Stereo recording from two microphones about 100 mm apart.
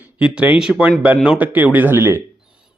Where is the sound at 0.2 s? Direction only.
10° right (ahead or behind).